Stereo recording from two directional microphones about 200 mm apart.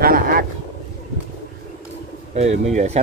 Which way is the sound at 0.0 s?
50° right (ahead or behind).